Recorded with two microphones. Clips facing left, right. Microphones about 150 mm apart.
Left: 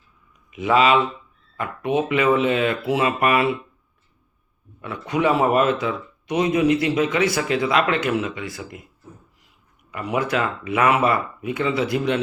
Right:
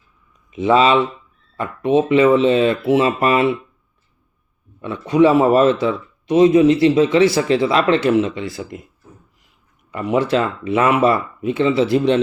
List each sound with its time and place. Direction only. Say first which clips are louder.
0.5 s speech: right 3 dB; 30° right (ahead or behind)
4.8 s speech: right 8 dB; 25° right (ahead or behind)
10.2 s speech: right 5 dB; 30° right (ahead or behind)